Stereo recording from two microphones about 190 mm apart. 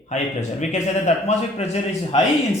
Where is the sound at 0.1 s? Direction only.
35° left (ahead or behind).